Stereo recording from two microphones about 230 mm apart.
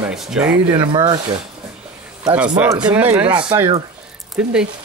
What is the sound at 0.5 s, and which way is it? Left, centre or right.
Speech, right.